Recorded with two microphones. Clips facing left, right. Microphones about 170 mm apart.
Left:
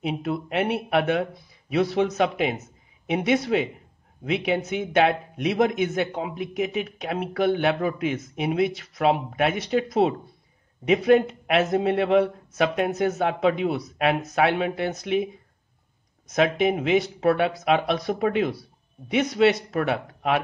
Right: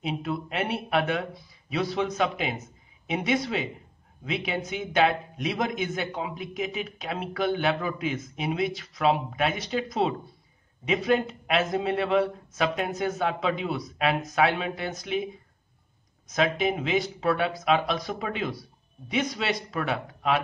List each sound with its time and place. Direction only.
0.0 s a man's voice: 60° left (ahead or behind)
16.3 s a man's voice: 60° left (ahead or behind)